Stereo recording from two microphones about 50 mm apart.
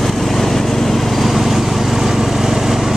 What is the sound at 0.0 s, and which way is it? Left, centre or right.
Vehicle, centre.